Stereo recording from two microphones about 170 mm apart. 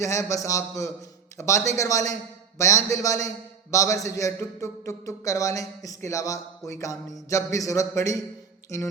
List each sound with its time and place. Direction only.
0.0 s a man's voice: 20° left (ahead or behind)